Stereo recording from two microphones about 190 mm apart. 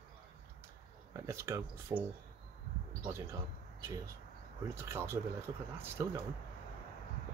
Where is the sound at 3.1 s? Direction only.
15° right (ahead or behind).